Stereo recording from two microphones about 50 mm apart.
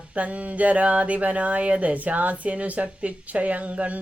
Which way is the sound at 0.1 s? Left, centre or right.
Right.